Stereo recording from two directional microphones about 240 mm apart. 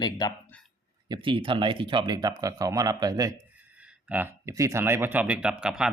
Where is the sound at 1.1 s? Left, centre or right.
Right.